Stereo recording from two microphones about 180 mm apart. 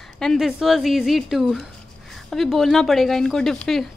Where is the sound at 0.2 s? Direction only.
Centre (ahead or behind).